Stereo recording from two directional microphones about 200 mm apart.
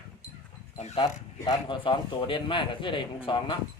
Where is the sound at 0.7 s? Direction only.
30° left (ahead or behind).